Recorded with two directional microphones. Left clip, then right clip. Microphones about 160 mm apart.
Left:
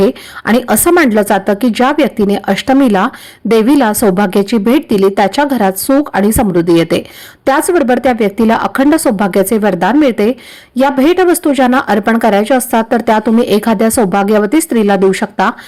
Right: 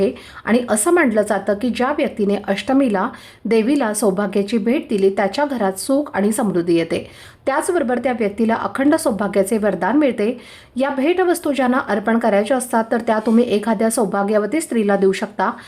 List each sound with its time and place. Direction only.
0.0 s a woman's voice: 35° left (ahead or behind)